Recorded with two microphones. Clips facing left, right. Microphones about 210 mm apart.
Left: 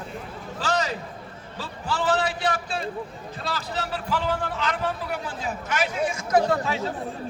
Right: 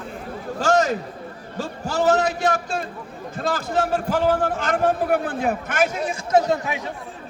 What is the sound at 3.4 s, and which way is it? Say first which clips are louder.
A man's voice: right 8 dB; 50° right (ahead or behind).